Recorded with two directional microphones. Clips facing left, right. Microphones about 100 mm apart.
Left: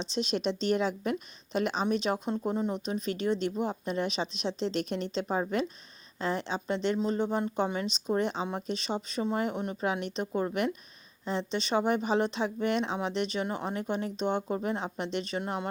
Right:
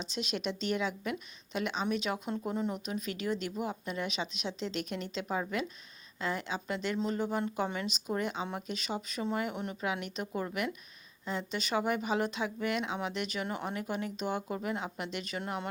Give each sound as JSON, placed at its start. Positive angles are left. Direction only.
{"t": 0.0, "sound": "a woman's voice", "side_deg": 30}